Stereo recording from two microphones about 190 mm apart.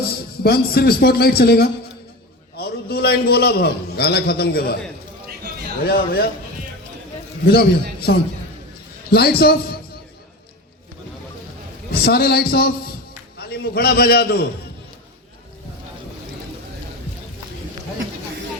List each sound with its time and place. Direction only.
0.4 s a man's voice: 55° left (ahead or behind)
5.8 s a man's voice: 55° left (ahead or behind)
7.4 s a man's voice: 55° left (ahead or behind)
11.9 s a man's voice: 55° left (ahead or behind)